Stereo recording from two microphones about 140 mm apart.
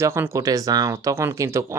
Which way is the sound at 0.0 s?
20° right (ahead or behind).